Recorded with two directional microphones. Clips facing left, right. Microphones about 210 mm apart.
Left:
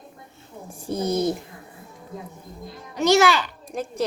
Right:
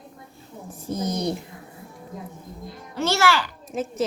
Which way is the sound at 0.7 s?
10° left (ahead or behind).